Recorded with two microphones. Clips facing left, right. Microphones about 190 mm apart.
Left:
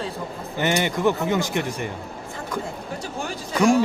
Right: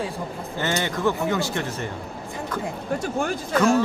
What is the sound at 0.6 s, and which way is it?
Speech, 15° left (ahead or behind).